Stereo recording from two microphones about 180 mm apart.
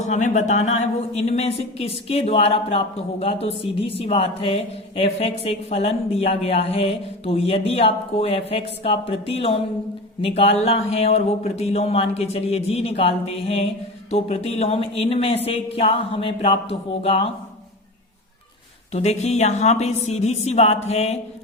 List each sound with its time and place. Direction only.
0.0 s a woman's voice: 40° left (ahead or behind)
18.9 s a woman's voice: 40° left (ahead or behind)